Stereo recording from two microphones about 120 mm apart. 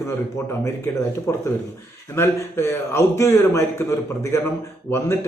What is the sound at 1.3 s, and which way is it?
A man's voice, 25° left (ahead or behind).